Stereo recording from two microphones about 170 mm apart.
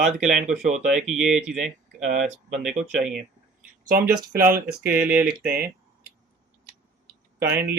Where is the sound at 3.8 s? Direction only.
65° right (ahead or behind).